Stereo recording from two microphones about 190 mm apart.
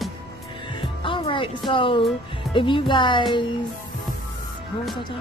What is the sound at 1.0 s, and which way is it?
Music, 25° left (ahead or behind).